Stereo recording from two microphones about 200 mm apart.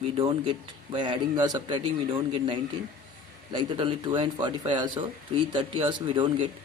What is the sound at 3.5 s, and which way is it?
A man's voice, 20° right (ahead or behind).